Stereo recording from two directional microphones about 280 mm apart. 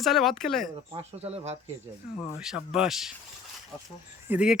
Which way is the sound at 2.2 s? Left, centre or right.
Centre.